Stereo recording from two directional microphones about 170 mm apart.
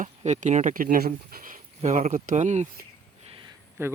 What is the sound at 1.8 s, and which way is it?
Speech, 45° right (ahead or behind).